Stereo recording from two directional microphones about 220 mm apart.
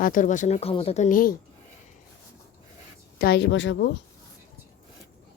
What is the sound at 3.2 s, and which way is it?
Speech, 50° left (ahead or behind).